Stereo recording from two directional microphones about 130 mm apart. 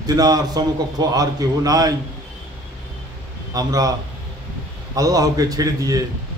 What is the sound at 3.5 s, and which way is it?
Speech, 30° right (ahead or behind).